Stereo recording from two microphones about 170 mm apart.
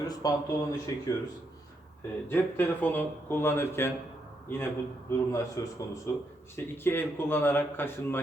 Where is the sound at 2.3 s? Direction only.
10° left (ahead or behind).